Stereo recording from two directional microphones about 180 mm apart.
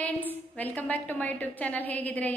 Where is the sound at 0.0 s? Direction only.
10° left (ahead or behind).